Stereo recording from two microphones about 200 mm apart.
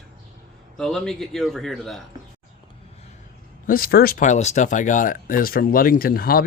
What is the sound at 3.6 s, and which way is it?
Speech, 45° left (ahead or behind).